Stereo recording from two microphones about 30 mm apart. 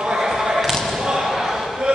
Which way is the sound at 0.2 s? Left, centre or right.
Centre.